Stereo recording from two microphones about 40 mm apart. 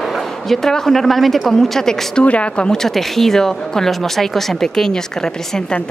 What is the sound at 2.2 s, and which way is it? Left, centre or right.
Speech, left.